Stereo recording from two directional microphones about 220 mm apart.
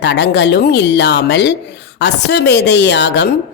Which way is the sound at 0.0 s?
50° left (ahead or behind).